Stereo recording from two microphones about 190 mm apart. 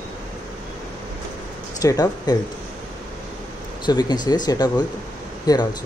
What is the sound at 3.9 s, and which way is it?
Speech, 20° left (ahead or behind).